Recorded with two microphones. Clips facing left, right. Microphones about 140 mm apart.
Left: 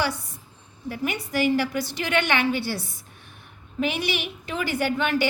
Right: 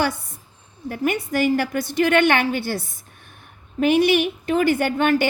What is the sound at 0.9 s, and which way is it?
A woman's voice, 50° right (ahead or behind).